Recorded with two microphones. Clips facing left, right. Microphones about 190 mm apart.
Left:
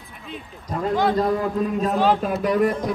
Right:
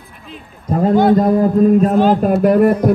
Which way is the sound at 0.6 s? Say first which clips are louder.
Right 9 dB; 50° right (ahead or behind).